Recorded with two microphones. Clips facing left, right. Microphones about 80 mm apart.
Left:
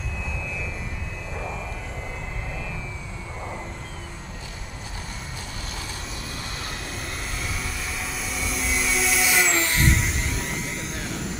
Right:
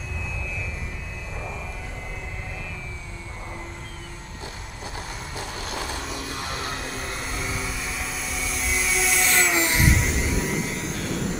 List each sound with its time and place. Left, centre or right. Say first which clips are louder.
6.9 s vehicle: right 2 dB; centre
9.6 s a sound: right 1 dB; centre
9.8 s vehicle: right 1 dB; centre